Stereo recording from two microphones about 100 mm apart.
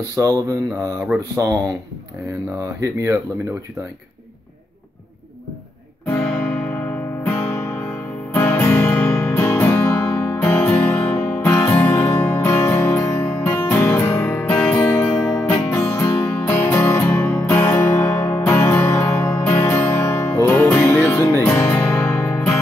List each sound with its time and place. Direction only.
0.1 s mantra: 30° right (ahead or behind)
0.9 s speech: 15° right (ahead or behind)
1.3 s speech: 30° right (ahead or behind)
2.6 s speech: 30° right (ahead or behind)
6.0 s music: 15° left (ahead or behind)
15.7 s music: 30° left (ahead or behind)
16.3 s music: 20° left (ahead or behind)